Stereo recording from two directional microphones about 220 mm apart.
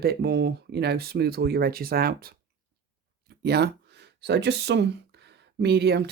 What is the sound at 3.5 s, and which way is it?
Speech, 50° right (ahead or behind).